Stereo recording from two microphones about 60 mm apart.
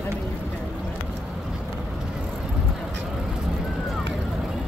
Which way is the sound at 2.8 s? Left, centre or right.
Centre.